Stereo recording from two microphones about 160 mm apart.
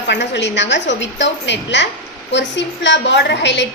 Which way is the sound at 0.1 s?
90° left.